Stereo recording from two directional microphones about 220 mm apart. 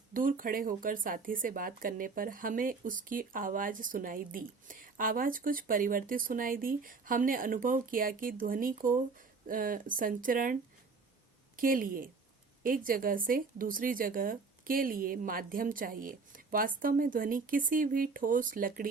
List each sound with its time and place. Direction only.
0.1 s speech: 40° right (ahead or behind)